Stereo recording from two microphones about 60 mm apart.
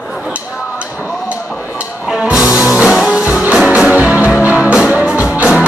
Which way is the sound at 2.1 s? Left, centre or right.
Centre.